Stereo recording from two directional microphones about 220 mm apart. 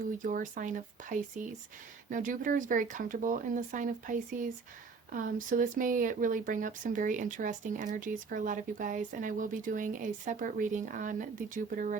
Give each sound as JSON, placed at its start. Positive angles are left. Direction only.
{"t": 0.2, "sound": "speech", "side_deg": -35}